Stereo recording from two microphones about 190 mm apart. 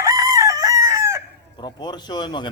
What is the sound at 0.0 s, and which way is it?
Chicken, 20° right (ahead or behind).